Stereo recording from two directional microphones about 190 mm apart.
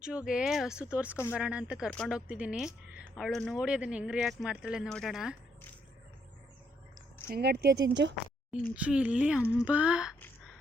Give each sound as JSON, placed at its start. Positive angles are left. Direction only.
{"t": 0.3, "sound": "speech", "side_deg": -5}
{"t": 7.3, "sound": "speech", "side_deg": -55}
{"t": 8.7, "sound": "speech", "side_deg": -5}
{"t": 9.4, "sound": "speech", "side_deg": 15}
{"t": 9.6, "sound": "speech", "side_deg": -5}